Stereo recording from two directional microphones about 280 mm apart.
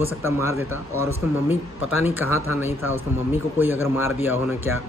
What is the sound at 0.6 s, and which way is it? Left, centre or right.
Speech, left.